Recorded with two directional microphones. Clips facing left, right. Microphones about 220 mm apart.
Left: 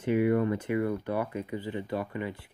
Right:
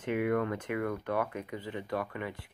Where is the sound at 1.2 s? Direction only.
30° left (ahead or behind).